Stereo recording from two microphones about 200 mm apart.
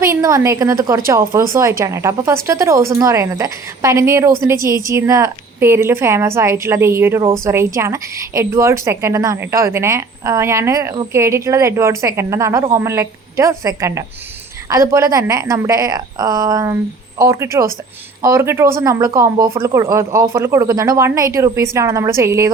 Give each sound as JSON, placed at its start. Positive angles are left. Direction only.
{"t": 0.0, "sound": "a woman's voice", "side_deg": -15}